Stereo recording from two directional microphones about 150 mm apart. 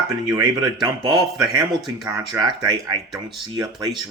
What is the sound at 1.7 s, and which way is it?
Speech, centre (ahead or behind).